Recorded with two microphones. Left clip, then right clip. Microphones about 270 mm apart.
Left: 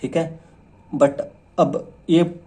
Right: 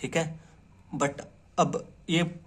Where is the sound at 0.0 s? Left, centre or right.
Right.